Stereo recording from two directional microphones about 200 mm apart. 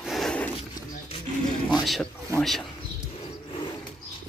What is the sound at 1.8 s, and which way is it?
Speech, centre (ahead or behind).